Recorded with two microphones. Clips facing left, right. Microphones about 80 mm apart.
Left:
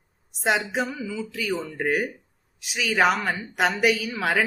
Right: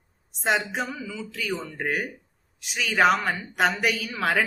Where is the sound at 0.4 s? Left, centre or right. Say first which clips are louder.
Left 1 dB; centre.